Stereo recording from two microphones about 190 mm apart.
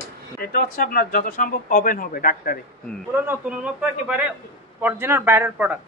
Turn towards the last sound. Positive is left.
turn(degrees=-10)  # may be behind; listen again after turning